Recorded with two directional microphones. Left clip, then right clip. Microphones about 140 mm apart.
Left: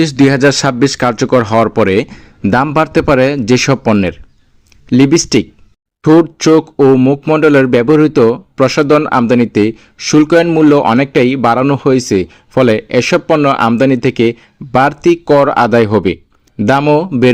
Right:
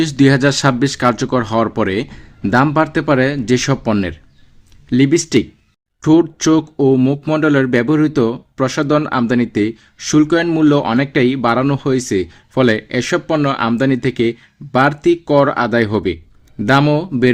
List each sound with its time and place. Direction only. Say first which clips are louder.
0.0 s speech: left 4 dB; 25° left (ahead or behind)
16.8 s speech: left 6 dB; 20° left (ahead or behind)